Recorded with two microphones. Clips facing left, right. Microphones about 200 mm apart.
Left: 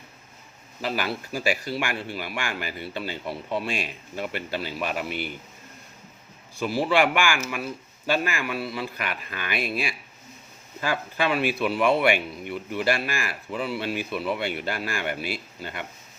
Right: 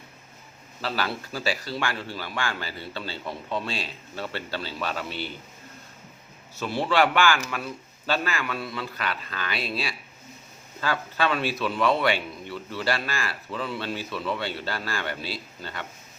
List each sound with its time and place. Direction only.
0.8 s speech: 15° left (ahead or behind)
6.6 s speech: 10° left (ahead or behind)